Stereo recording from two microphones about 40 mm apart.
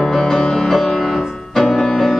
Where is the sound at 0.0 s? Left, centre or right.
Centre.